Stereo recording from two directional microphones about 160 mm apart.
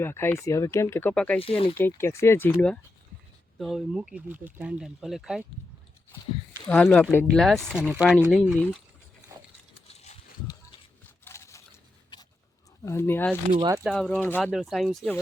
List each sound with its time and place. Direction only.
0.0 s speech: 15° left (ahead or behind)
1.4 s speech: 35° left (ahead or behind)
2.0 s speech: 15° left (ahead or behind)
3.6 s speech: centre (ahead or behind)
6.7 s speech: 10° left (ahead or behind)
11.3 s a sound: 20° left (ahead or behind)
12.8 s speech: 15° left (ahead or behind)
13.6 s speech: 20° right (ahead or behind)
13.8 s speech: 5° left (ahead or behind)